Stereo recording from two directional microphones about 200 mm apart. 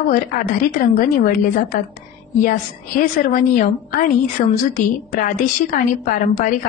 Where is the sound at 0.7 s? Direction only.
45° left (ahead or behind).